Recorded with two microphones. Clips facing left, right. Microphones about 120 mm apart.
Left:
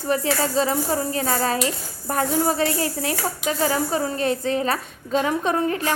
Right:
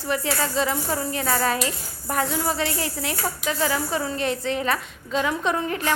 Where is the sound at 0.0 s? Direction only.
35° left (ahead or behind).